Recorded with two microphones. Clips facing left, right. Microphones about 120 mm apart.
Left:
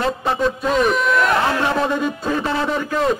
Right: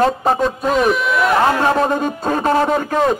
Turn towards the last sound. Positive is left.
turn(degrees=-45)  # may be behind; listen again after turning